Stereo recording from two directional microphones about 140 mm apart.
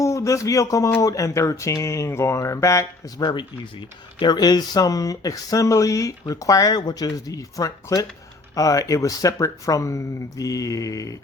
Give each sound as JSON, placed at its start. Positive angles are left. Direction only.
{"t": 0.0, "sound": "speech", "side_deg": 20}